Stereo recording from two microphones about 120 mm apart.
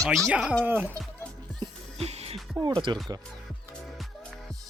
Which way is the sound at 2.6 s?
40° right (ahead or behind).